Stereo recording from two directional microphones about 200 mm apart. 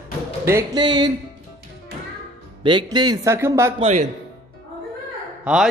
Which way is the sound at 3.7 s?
35° right (ahead or behind).